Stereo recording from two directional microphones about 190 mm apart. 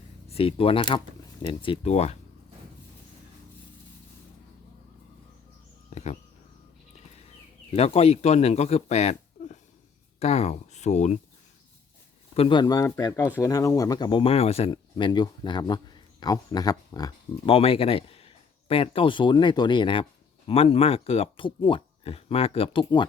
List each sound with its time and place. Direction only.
0.3 s speech: 30° left (ahead or behind)
5.9 s insect: 35° left (ahead or behind)
7.7 s speech: 35° left (ahead or behind)
12.3 s speech: 25° left (ahead or behind)